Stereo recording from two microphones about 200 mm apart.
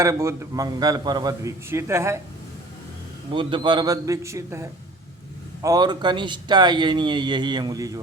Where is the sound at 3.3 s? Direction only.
25° right (ahead or behind).